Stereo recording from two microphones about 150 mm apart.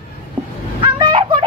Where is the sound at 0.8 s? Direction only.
35° right (ahead or behind).